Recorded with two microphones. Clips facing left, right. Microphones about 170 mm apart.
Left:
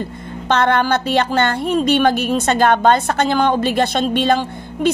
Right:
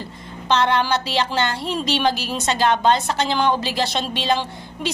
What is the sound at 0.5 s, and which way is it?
A woman's voice, 50° left (ahead or behind).